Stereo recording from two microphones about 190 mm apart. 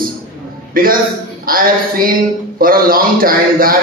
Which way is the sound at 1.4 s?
50° right (ahead or behind).